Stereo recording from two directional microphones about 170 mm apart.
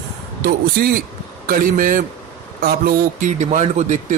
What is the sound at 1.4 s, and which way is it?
Speech, 55° right (ahead or behind).